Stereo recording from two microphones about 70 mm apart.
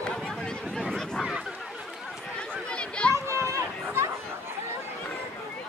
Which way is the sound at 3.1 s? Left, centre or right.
Right.